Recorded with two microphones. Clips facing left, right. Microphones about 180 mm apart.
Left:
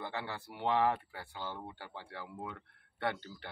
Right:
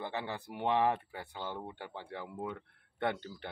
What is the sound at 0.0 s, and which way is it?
Speech, 20° right (ahead or behind).